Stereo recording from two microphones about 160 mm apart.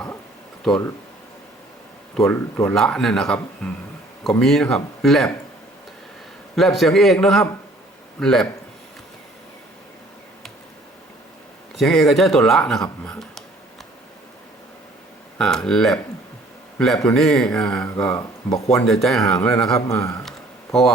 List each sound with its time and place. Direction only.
0.7 s speech: centre (ahead or behind)
2.2 s speech: centre (ahead or behind)
6.6 s speech: centre (ahead or behind)
11.8 s speech: centre (ahead or behind)
15.4 s speech: 5° left (ahead or behind)
19.9 s a man's voice: 20° left (ahead or behind)